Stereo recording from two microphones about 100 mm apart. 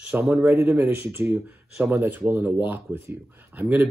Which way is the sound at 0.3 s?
20° right (ahead or behind).